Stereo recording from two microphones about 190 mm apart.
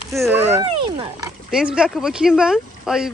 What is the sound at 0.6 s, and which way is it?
Speech, 25° right (ahead or behind).